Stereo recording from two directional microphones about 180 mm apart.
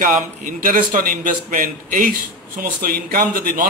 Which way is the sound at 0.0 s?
50° right (ahead or behind).